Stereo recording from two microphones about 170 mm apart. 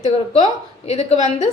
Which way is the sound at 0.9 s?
40° left (ahead or behind).